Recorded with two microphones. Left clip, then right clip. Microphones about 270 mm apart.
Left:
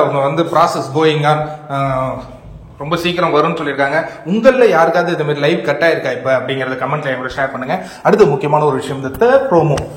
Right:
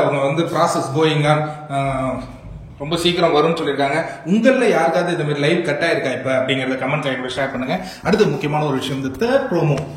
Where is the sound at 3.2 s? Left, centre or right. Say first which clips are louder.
Left 2 dB; centre.